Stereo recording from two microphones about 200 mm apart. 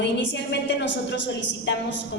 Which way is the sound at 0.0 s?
60° left (ahead or behind).